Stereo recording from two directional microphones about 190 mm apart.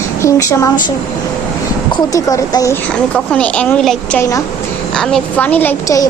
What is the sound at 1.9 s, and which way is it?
Speech, 20° left (ahead or behind).